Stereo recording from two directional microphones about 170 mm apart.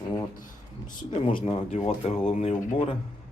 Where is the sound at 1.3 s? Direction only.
30° left (ahead or behind).